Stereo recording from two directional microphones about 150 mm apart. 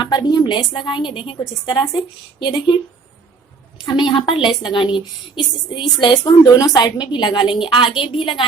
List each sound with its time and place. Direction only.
0.0 s a woman's voice: 30° left (ahead or behind)
3.8 s a woman's voice: 30° left (ahead or behind)